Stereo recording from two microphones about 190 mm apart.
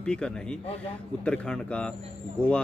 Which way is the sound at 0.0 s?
5° left (ahead or behind).